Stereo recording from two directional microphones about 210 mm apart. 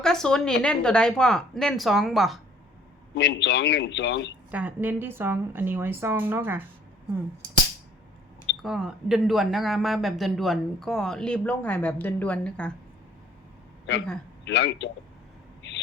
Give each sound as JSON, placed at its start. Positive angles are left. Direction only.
{"t": 0.0, "sound": "speech", "side_deg": 5}
{"t": 3.2, "sound": "a man's voice", "side_deg": 55}
{"t": 4.5, "sound": "a woman's voice", "side_deg": -10}
{"t": 8.6, "sound": "speech", "side_deg": -5}
{"t": 14.4, "sound": "a man's voice", "side_deg": 55}